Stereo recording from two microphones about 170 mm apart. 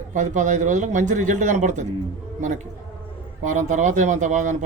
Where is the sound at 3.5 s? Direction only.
45° right (ahead or behind).